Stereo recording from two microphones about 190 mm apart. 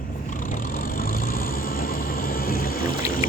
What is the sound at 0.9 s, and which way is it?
Vehicle, 50° left (ahead or behind).